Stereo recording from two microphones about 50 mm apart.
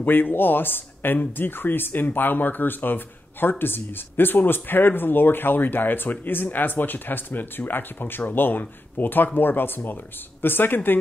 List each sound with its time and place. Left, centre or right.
0.0 s speech: left